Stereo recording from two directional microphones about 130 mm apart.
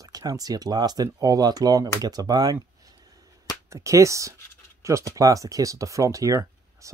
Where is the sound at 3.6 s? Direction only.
25° right (ahead or behind).